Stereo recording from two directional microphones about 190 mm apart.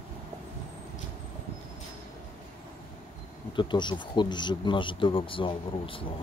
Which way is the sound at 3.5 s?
25° left (ahead or behind).